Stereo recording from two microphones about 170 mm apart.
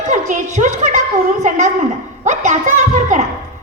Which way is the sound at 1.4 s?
45° right (ahead or behind).